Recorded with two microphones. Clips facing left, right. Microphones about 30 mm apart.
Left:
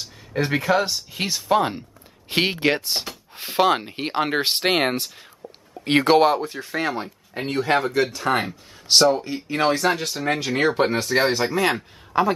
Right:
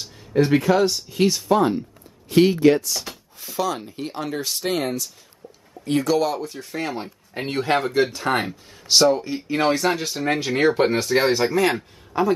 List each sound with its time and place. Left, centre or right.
0.3 s speech: centre
2.2 s speech: left
6.3 s speech: left
6.6 s speech: centre
7.6 s speech: centre
12.1 s a man's voice: left